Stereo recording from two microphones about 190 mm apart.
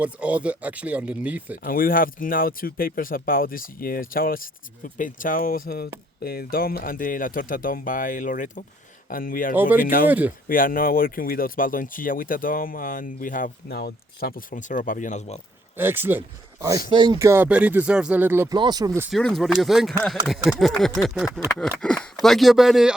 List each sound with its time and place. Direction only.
0.0 s speech: 5° right (ahead or behind)
1.6 s speech: 50° left (ahead or behind)
9.6 s speech: 10° right (ahead or behind)
9.8 s speech: 50° left (ahead or behind)
10.1 s speech: 10° right (ahead or behind)
10.5 s speech: 50° left (ahead or behind)
15.8 s speech: 10° right (ahead or behind)
18.5 s speech: 20° right (ahead or behind)
19.1 s speech: centre (ahead or behind)